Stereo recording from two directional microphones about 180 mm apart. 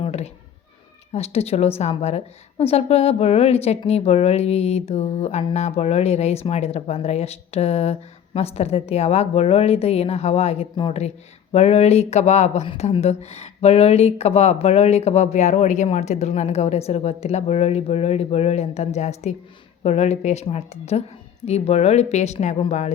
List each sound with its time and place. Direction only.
0.0 s cat: 35° left (ahead or behind)
1.1 s a woman's voice: 35° left (ahead or behind)